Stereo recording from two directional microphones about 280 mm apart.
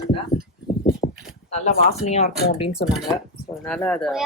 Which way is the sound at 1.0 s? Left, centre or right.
Centre.